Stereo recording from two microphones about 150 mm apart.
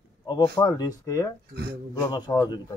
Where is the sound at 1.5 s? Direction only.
90° right.